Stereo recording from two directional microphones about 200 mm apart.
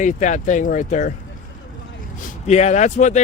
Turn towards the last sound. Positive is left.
turn(degrees=35)  # may be behind; listen again after turning